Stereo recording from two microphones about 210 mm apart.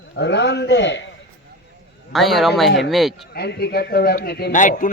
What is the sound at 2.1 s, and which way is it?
A man's voice, centre (ahead or behind).